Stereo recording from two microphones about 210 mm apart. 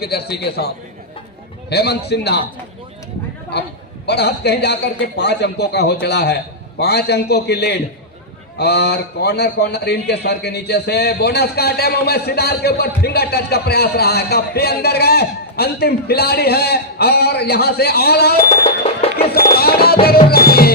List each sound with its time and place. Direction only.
0.0 s a man's voice: 50° left (ahead or behind)
1.7 s a man's voice: 50° left (ahead or behind)
4.0 s a man's voice: 50° left (ahead or behind)
18.8 s music: 25° left (ahead or behind)
19.5 s music: 45° left (ahead or behind)